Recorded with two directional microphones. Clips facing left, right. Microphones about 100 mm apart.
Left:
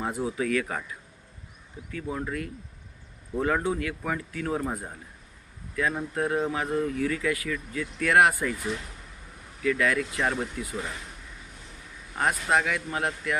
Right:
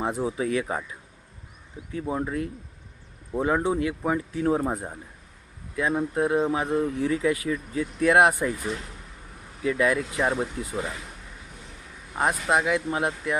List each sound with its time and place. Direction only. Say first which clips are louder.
0.0 s speech: right 2 dB; 25° right (ahead or behind)
1.9 s speech: right 4 dB; 25° right (ahead or behind)
9.6 s speech: right 2 dB; 20° right (ahead or behind)
10.6 s speech: right 2 dB; 35° right (ahead or behind)
12.1 s speech: right 1 dB; 20° right (ahead or behind)